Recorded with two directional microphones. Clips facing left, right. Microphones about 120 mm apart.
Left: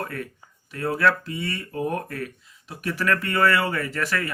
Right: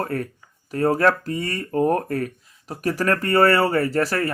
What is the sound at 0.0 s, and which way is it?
Speech, 40° right (ahead or behind).